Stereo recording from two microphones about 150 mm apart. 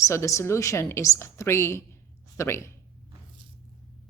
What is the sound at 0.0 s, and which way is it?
A woman's voice, 20° left (ahead or behind).